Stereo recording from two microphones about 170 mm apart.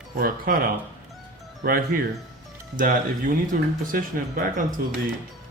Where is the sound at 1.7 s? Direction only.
60° right (ahead or behind).